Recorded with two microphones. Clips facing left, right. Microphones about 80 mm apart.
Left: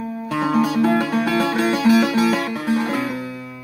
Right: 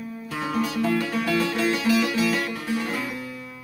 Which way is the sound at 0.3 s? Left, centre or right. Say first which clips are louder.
Left 9 dB; left.